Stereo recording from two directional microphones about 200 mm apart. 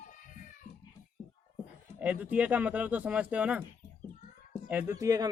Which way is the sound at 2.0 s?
5° right (ahead or behind).